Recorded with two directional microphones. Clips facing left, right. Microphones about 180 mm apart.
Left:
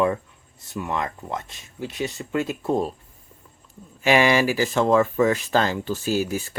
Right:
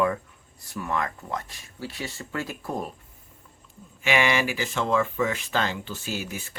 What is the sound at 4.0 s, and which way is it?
Speech, 40° left (ahead or behind).